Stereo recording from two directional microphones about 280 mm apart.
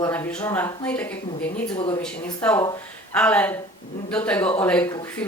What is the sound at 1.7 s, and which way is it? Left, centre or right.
Speech, centre.